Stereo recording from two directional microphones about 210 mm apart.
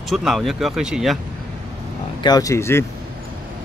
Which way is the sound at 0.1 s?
Centre (ahead or behind).